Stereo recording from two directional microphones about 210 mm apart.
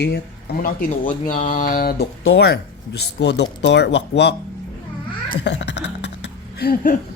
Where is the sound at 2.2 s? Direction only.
60° left (ahead or behind).